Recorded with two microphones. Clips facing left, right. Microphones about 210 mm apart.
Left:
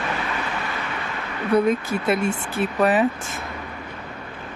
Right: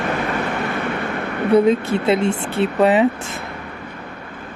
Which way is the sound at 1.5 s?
25° right (ahead or behind).